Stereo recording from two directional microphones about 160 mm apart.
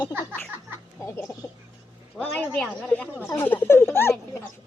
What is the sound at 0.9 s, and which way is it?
Speech, 15° left (ahead or behind).